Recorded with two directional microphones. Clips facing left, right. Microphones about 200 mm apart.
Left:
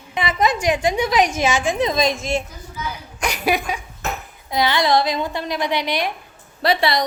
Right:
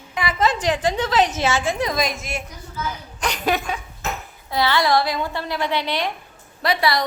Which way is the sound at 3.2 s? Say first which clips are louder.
Left 1 dB; 10° left (ahead or behind).